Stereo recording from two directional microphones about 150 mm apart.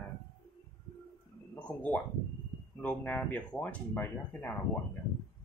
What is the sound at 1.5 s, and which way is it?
Speech, 10° left (ahead or behind).